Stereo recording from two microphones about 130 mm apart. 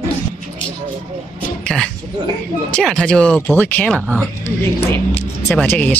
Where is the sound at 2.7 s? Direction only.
5° left (ahead or behind).